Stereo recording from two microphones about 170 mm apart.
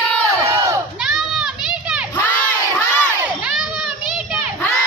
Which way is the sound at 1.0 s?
Centre (ahead or behind).